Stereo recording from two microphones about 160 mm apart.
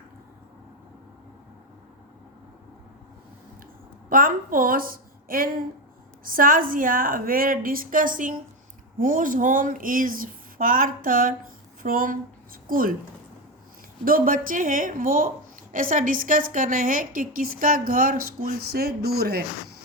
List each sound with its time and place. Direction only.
4.1 s a woman's voice: 60° right (ahead or behind)
14.0 s a woman's voice: 60° right (ahead or behind); by 19.4 s 80° right